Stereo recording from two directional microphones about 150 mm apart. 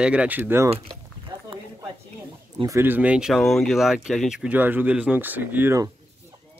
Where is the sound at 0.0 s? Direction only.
5° right (ahead or behind).